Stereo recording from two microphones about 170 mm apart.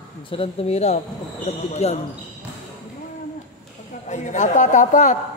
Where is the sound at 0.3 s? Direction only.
35° left (ahead or behind).